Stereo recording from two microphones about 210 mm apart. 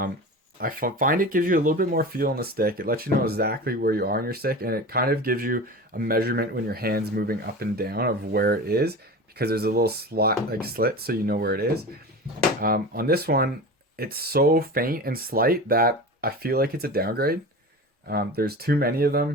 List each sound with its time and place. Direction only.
0.6 s speech: 40° right (ahead or behind)
18.3 s speech: 45° right (ahead or behind)